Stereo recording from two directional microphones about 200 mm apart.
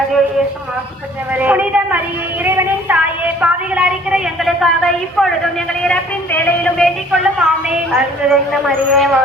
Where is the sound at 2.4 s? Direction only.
10° right (ahead or behind).